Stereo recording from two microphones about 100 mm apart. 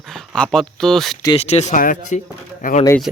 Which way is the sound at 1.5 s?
90° left.